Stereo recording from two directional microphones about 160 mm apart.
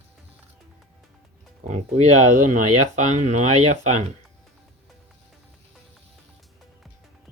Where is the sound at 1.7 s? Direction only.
45° right (ahead or behind).